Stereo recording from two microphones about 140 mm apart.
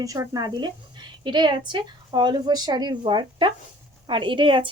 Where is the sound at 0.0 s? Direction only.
25° right (ahead or behind).